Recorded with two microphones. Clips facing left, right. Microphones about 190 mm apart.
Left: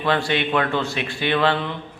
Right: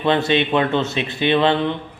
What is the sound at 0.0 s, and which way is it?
A man's voice, 20° right (ahead or behind).